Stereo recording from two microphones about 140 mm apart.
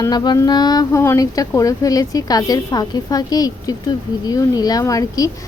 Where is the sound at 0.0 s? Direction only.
30° left (ahead or behind).